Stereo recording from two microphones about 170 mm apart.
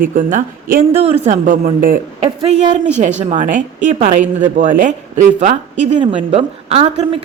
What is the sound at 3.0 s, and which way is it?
A woman's voice, 45° right (ahead or behind).